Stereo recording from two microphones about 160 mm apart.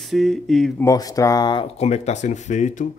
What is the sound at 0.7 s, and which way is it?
Speech, 20° left (ahead or behind).